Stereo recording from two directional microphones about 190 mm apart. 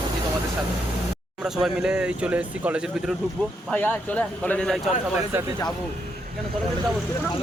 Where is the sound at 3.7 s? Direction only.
10° left (ahead or behind).